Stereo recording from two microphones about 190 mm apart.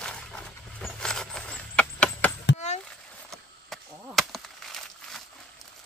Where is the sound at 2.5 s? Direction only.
35° left (ahead or behind).